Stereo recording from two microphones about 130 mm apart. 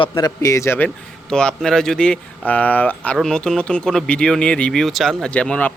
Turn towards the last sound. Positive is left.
turn(degrees=10)  # may be behind; listen again after turning